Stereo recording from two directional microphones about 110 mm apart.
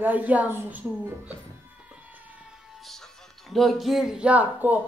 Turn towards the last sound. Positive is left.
turn(degrees=-15)  # may be behind; listen again after turning